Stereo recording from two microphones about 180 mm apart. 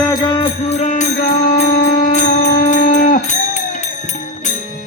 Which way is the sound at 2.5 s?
55° left (ahead or behind).